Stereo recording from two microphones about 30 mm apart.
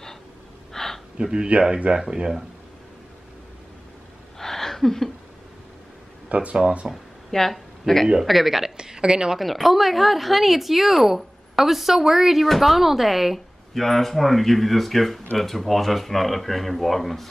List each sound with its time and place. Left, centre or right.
0.7 s a sound: centre
1.3 s a man's voice: right
1.9 s speech: right
4.4 s a sound: centre
6.2 s speech: right
7.2 s speech: centre
8.2 s speech: centre
8.7 s a sound: right
9.4 s speech: centre
13.7 s speech: centre